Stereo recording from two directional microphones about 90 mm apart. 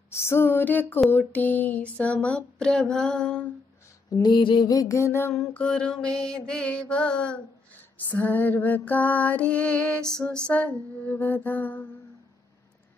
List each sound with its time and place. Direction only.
0.2 s mantra: 25° left (ahead or behind); by 3.4 s 10° left (ahead or behind)
4.2 s mantra: 65° left (ahead or behind)
4.6 s music: 40° left (ahead or behind)
5.5 s mantra: 10° left (ahead or behind)